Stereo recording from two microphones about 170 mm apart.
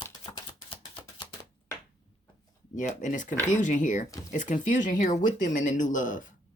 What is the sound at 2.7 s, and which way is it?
Speech, 45° left (ahead or behind).